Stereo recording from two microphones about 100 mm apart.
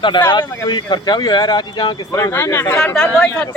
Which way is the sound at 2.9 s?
10° left (ahead or behind).